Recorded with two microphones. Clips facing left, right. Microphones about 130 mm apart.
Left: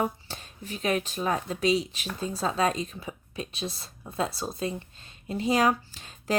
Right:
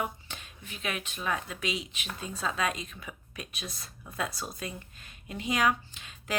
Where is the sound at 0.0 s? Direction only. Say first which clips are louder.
Left 6 dB; 35° left (ahead or behind).